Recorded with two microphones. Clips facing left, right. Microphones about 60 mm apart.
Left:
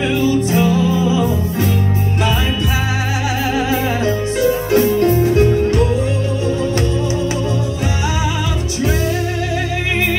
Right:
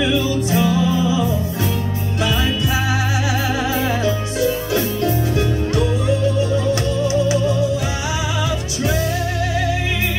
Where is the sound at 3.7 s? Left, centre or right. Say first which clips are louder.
Left 2 dB; left.